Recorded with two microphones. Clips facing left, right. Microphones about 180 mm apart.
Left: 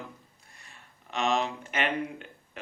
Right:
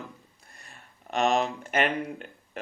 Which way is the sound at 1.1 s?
45° right (ahead or behind).